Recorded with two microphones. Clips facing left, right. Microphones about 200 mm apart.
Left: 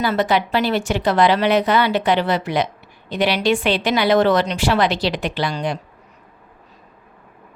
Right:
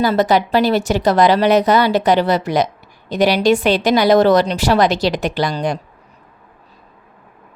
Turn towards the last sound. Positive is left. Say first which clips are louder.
# right 4 dB
turn(degrees=-40)  # may be behind; listen again after turning